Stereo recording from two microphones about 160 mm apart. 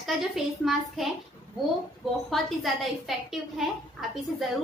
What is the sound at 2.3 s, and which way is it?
A woman's voice, centre (ahead or behind).